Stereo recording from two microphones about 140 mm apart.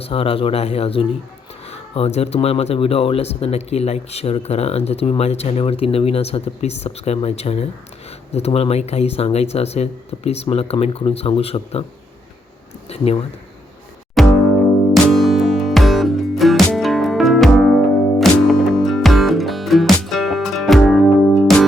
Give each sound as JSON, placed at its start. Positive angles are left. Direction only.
{"t": 0.0, "sound": "speech", "side_deg": 40}
{"t": 12.9, "sound": "speech", "side_deg": 45}
{"t": 14.2, "sound": "music", "side_deg": 0}